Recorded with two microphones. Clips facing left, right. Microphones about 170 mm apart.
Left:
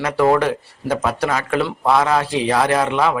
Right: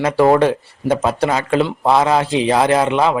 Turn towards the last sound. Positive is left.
turn(degrees=-25)  # may be behind; listen again after turning